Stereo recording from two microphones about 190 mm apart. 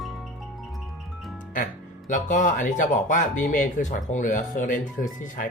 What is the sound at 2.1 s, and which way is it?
Speech, 40° left (ahead or behind).